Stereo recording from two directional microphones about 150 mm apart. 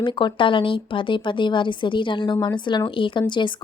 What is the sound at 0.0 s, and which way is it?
A woman's voice, 30° left (ahead or behind).